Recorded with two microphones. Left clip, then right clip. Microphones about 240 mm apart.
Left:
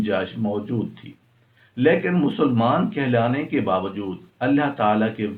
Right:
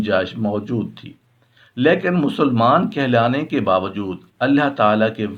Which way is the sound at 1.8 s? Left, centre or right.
Right.